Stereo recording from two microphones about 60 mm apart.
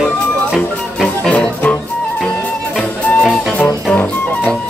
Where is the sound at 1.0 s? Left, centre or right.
Left.